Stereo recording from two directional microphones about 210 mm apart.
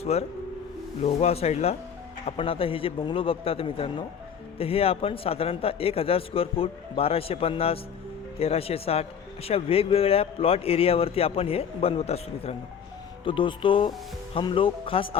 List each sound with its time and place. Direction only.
0.0 s a man's voice: 30° left (ahead or behind)